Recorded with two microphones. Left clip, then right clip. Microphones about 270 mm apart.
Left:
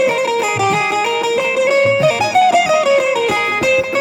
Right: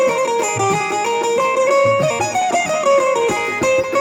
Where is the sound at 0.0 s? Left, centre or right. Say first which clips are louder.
Left 1 dB; left.